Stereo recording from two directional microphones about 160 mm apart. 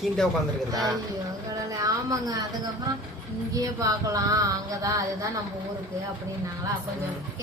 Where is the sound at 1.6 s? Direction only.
20° right (ahead or behind).